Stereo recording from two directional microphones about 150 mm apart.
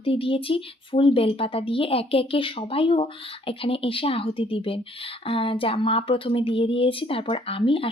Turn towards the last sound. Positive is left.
turn(degrees=35)  # may be behind; listen again after turning